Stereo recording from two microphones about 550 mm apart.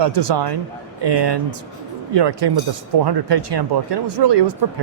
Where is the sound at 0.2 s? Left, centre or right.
Right.